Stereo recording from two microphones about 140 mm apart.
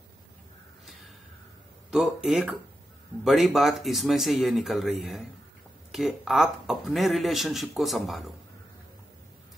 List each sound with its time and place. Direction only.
1.9 s speech: 5° right (ahead or behind)